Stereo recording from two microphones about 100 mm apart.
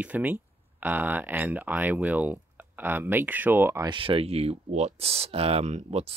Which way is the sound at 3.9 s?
65° right (ahead or behind).